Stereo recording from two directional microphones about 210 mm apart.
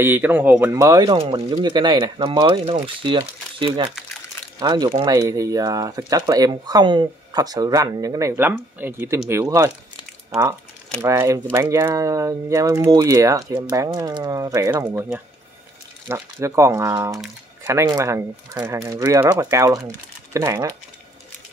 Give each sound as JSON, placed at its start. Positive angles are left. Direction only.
{"t": 0.0, "sound": "speech", "side_deg": -10}
{"t": 11.0, "sound": "speech", "side_deg": -15}